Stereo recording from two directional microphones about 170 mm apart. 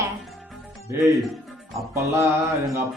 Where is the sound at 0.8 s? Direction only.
15° right (ahead or behind).